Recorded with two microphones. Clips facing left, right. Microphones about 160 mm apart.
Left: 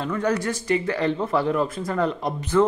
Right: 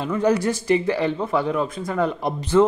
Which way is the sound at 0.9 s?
5° right (ahead or behind).